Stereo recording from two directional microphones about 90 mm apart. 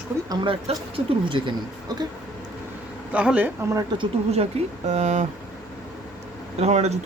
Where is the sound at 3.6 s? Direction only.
35° right (ahead or behind).